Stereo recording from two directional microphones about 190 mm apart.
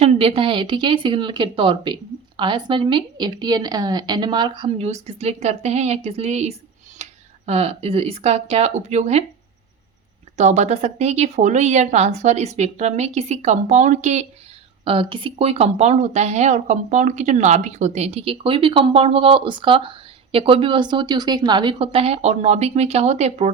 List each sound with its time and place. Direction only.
0.0 s a woman's voice: 30° right (ahead or behind)
10.3 s speech: 35° right (ahead or behind)
14.8 s speech: 25° right (ahead or behind)